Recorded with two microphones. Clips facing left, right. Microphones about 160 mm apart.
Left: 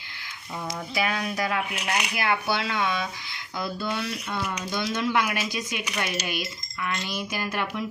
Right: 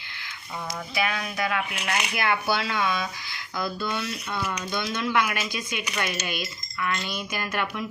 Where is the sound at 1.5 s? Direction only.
15° left (ahead or behind).